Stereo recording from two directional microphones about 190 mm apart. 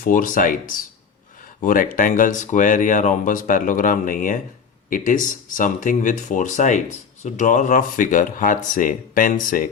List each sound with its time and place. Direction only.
0.0 s speech: 45° left (ahead or behind)